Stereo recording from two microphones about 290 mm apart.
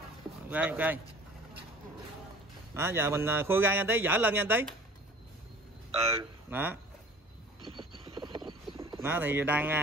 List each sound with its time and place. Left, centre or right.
0.5 s speech: centre
2.7 s a man's voice: centre
6.1 s speech: centre
7.7 s mechanisms: centre
8.5 s bird: centre